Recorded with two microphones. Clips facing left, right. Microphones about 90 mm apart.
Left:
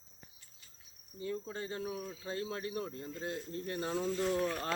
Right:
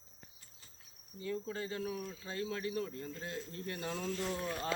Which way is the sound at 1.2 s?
30° left (ahead or behind).